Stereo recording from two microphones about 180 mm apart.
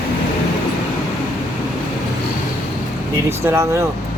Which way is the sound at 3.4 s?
15° right (ahead or behind).